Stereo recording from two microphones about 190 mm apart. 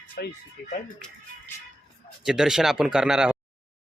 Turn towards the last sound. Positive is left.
turn(degrees=-5)  # may be behind; listen again after turning